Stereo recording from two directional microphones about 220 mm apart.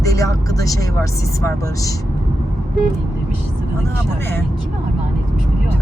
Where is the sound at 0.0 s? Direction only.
15° left (ahead or behind).